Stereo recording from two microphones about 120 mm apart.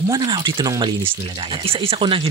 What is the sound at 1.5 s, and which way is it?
Speech, 50° right (ahead or behind).